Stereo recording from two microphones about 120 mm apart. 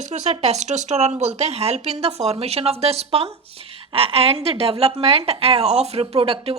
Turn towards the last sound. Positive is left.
turn(degrees=-55)  # may be behind; listen again after turning